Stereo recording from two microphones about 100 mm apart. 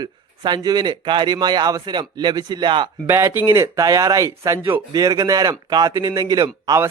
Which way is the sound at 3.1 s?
25° right (ahead or behind).